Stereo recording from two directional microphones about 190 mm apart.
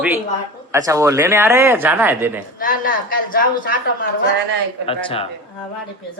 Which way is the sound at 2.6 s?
50° left (ahead or behind).